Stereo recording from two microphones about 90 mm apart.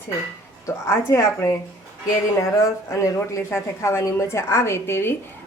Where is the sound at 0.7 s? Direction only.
30° left (ahead or behind).